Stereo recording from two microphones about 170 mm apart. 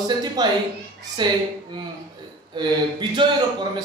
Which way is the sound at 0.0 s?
25° right (ahead or behind).